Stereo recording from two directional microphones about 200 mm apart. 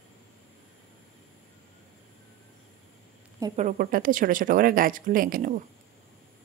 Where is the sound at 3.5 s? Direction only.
40° right (ahead or behind).